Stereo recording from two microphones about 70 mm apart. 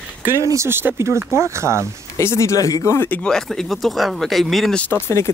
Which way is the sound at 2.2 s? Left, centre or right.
Left.